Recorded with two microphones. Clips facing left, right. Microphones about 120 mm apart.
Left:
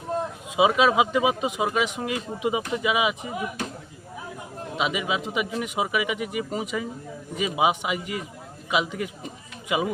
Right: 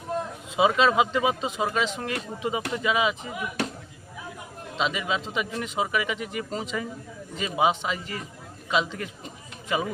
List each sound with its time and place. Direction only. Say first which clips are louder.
0.5 s a man's voice: left 1 dB; 10° left (ahead or behind)
4.8 s a man's voice: left 1 dB; 10° left (ahead or behind)